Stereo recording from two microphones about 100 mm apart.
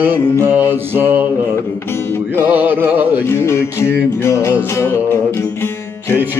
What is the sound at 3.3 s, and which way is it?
Music, 25° left (ahead or behind).